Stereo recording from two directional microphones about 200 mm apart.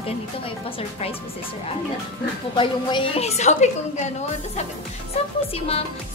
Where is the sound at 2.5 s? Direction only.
25° left (ahead or behind).